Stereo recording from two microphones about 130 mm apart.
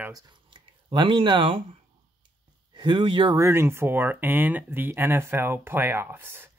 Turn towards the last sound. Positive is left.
turn(degrees=-15)  # may be behind; listen again after turning